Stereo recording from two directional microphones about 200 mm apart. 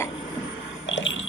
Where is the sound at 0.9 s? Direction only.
70° left (ahead or behind).